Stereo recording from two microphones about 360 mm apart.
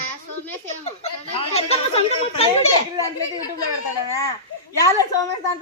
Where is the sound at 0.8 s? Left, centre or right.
Centre.